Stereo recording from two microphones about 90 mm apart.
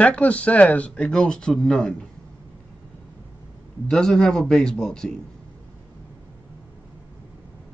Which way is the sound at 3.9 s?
5° left (ahead or behind).